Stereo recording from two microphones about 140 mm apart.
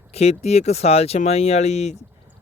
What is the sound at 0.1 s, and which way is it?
Speech, 50° left (ahead or behind).